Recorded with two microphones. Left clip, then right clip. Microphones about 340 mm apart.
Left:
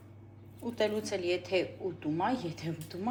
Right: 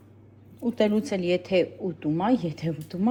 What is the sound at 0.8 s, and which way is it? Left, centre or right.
Speech, right.